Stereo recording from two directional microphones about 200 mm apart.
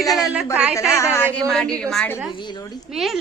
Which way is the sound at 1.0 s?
10° left (ahead or behind).